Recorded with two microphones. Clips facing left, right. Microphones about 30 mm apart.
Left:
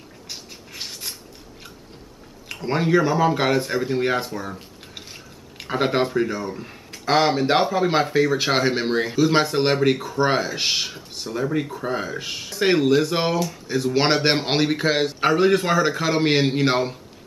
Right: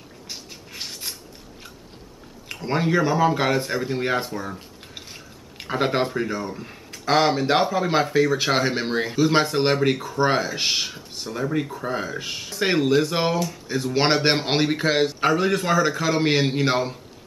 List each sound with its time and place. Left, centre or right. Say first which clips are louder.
0.3 s a sound: even; centre
2.4 s speech: left 1 dB; centre
15.1 s a man's voice: left 3 dB; centre